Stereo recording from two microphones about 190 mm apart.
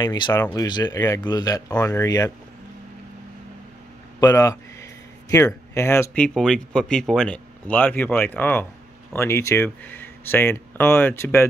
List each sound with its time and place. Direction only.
0.0 s speech: 20° left (ahead or behind)
4.2 s speech: 15° left (ahead or behind)